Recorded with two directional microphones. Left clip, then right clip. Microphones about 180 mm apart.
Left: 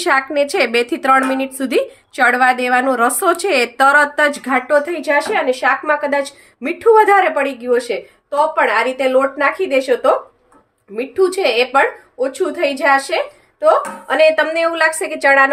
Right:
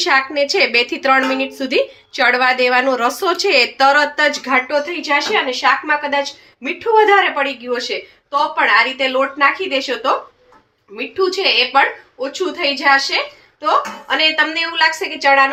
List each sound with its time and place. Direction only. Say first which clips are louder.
0.0 s a woman's voice: even; 65° left (ahead or behind); by 13.1 s 90° left
14.2 s a woman's voice: left 4 dB; 90° left